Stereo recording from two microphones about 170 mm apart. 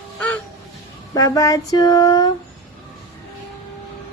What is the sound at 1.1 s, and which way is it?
A woman's voice, 20° left (ahead or behind).